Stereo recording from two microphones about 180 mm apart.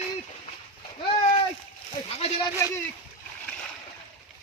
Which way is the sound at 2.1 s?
30° left (ahead or behind).